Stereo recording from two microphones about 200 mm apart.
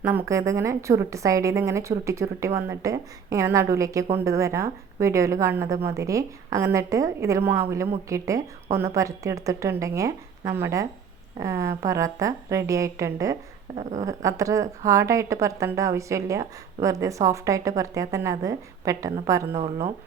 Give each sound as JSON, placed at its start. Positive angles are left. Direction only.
{"t": 0.0, "sound": "a woman's voice", "side_deg": -10}
{"t": 19.5, "sound": "a woman's voice", "side_deg": -30}